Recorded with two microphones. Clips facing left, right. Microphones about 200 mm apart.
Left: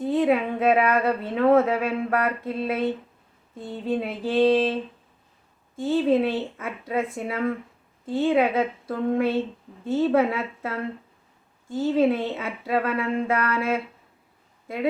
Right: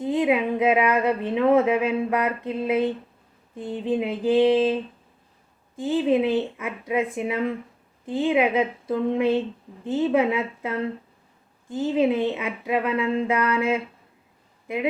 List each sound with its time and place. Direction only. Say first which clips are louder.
0.0 s speech: even; 15° right (ahead or behind)
5.8 s speech: even; 15° right (ahead or behind)
11.8 s speech: even; 15° right (ahead or behind)